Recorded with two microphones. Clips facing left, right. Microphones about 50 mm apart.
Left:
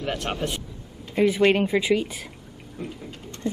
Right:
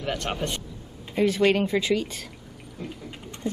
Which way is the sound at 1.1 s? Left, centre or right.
Centre.